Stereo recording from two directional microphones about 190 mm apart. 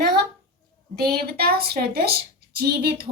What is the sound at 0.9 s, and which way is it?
A woman's voice, 55° right (ahead or behind).